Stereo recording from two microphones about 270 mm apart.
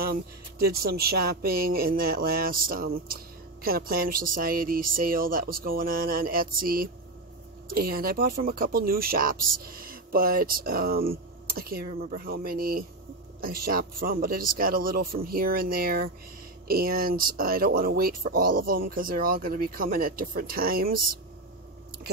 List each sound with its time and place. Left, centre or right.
0.0 s speech: right